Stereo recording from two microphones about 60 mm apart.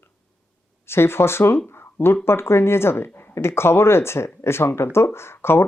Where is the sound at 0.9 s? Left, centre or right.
Left.